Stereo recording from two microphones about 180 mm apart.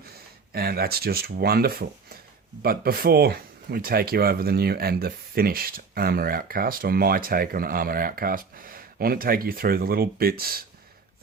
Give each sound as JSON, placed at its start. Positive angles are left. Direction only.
{"t": 0.5, "sound": "speech", "side_deg": -60}